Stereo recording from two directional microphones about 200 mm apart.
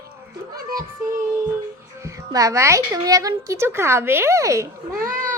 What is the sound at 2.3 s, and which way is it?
A woman's voice, 15° right (ahead or behind).